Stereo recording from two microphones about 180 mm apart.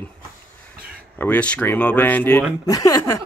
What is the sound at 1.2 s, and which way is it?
Speech, 10° left (ahead or behind).